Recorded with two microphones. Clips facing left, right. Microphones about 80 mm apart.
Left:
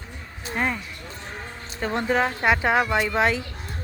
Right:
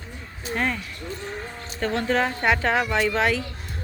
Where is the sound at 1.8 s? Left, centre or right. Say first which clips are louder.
Even; centre.